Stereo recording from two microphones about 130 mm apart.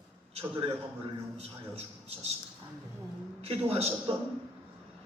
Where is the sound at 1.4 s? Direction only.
50° right (ahead or behind).